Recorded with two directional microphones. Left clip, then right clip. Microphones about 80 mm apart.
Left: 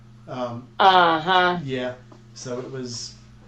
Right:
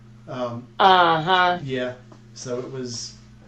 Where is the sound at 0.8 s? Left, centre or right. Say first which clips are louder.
Even; centre.